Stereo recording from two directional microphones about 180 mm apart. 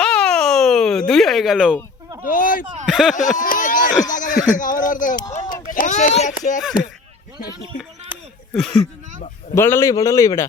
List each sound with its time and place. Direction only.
0.0 s a sound: 5° left (ahead or behind)
2.2 s speech: 50° left (ahead or behind)
2.8 s speech: centre (ahead or behind)
3.3 s a sound: 45° left (ahead or behind)
4.5 s speech: 50° left (ahead or behind)
5.4 s a sound: 20° left (ahead or behind)
5.6 s speech: 45° left (ahead or behind)
8.5 s speech: centre (ahead or behind)
9.6 s a man's voice: 15° left (ahead or behind)